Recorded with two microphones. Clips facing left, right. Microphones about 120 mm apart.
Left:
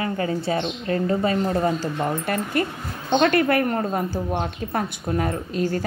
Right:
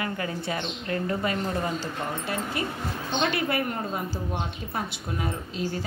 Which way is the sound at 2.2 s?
60° left (ahead or behind).